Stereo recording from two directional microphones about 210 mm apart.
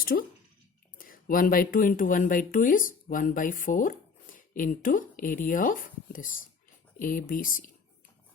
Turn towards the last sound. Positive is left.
turn(degrees=40)  # may be behind; listen again after turning